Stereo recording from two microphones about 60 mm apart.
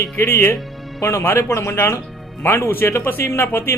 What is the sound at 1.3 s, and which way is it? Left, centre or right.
Speech, left.